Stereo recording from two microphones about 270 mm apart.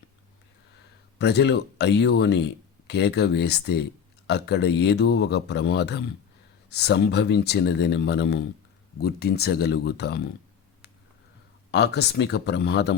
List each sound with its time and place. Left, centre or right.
1.2 s speech: left
11.7 s speech: left